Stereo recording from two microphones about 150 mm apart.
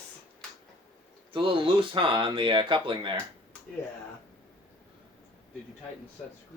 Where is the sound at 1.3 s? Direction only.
35° right (ahead or behind).